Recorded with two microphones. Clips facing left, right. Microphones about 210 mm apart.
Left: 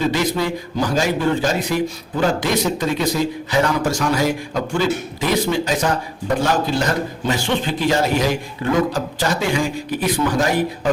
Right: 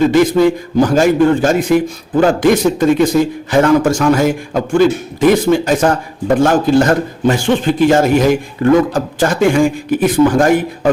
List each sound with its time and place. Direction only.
0.1 s a man's voice: 50° right (ahead or behind)